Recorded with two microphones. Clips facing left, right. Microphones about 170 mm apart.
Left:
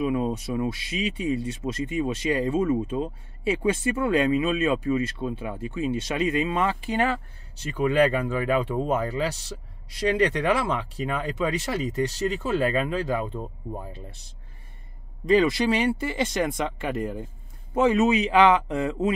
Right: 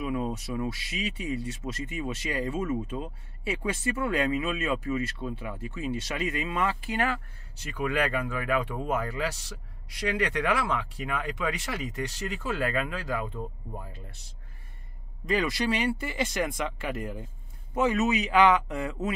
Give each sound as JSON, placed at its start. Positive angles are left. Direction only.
{"t": 0.0, "sound": "speech", "side_deg": 20}
{"t": 15.2, "sound": "speech", "side_deg": 25}